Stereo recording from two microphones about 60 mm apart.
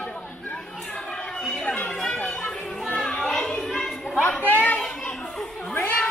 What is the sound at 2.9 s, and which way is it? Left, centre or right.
Children playing, centre.